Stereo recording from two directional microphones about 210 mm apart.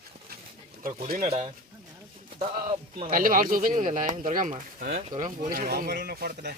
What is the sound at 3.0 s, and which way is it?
Speech, 40° right (ahead or behind).